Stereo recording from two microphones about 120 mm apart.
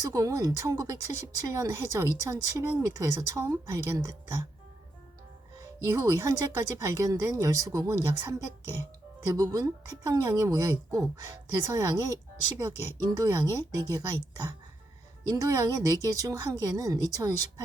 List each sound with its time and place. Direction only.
0.0 s speech: 30° right (ahead or behind)
5.8 s speech: 25° right (ahead or behind)